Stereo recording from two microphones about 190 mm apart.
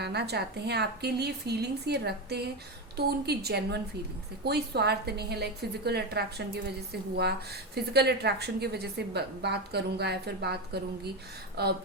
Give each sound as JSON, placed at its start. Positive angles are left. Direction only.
{"t": 0.0, "sound": "a woman's voice", "side_deg": -60}